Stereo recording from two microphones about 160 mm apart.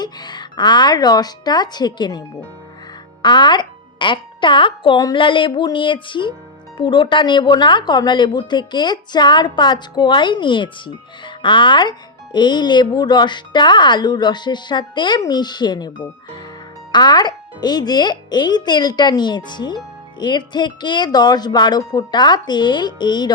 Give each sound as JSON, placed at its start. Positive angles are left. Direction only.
{"t": 0.0, "sound": "speech", "side_deg": 25}
{"t": 16.9, "sound": "speech", "side_deg": 25}